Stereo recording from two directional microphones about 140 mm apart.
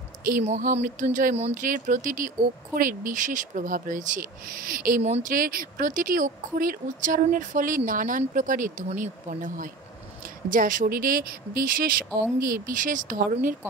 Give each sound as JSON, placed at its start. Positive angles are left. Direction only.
{"t": 0.4, "sound": "speech", "side_deg": -55}
{"t": 1.5, "sound": "speech", "side_deg": -75}
{"t": 5.0, "sound": "speech", "side_deg": -50}
{"t": 5.3, "sound": "a woman's voice", "side_deg": -90}
{"t": 8.2, "sound": "a woman's voice", "side_deg": -70}